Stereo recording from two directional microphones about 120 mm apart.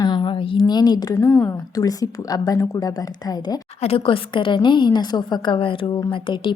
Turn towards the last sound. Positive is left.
turn(degrees=45)  # may be behind; listen again after turning